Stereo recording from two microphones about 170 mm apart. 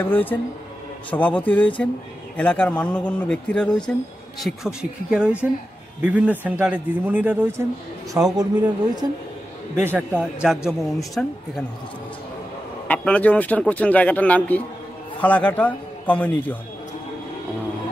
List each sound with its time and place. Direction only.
0.1 s a man's voice: 10° left (ahead or behind); by 8.5 s 20° right (ahead or behind)
9.8 s speech: 10° right (ahead or behind); by 11.3 s 5° left (ahead or behind)
12.8 s a man's voice: 10° left (ahead or behind)